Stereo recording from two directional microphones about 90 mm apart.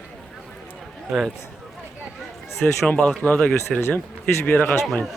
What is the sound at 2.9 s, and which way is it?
Speech, 15° left (ahead or behind).